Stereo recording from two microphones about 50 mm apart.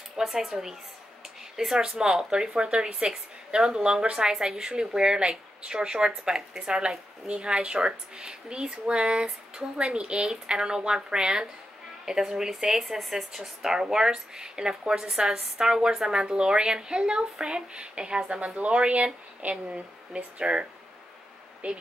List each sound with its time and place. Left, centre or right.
0.2 s speech: centre
21.6 s speech: right